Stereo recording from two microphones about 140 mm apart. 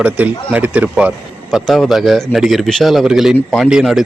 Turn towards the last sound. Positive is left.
turn(degrees=-5)  # may be behind; listen again after turning